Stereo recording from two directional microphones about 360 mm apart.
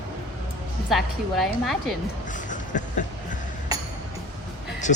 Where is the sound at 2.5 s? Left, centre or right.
Left.